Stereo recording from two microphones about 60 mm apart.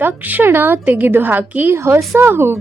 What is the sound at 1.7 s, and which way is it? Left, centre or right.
Speech, right.